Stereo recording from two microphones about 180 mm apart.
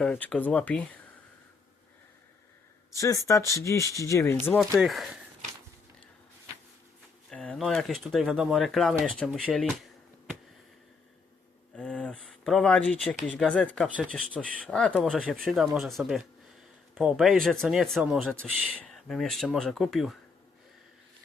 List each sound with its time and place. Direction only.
0.0 s speech: 5° left (ahead or behind)
2.9 s speech: 15° left (ahead or behind)
4.4 s speech: centre (ahead or behind)
7.3 s speech: 5° left (ahead or behind)
11.8 s speech: 5° left (ahead or behind)